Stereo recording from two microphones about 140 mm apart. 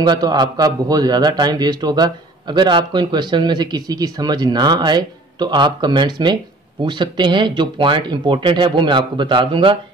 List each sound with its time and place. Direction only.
0.0 s a man's voice: 30° right (ahead or behind)